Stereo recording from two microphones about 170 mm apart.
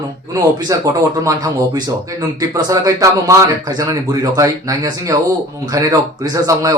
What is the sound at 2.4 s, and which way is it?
Speech, 20° right (ahead or behind).